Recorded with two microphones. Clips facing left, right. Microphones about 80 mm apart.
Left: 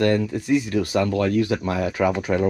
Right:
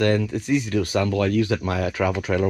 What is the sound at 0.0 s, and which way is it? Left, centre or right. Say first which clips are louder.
Speech: left 1 dB; left.